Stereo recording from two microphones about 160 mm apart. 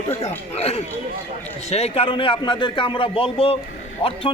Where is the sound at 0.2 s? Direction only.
40° left (ahead or behind).